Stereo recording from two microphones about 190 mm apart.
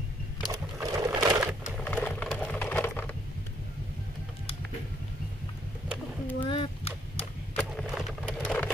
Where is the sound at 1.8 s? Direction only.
5° left (ahead or behind).